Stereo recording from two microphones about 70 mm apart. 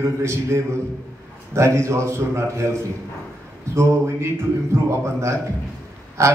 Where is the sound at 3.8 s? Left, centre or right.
Right.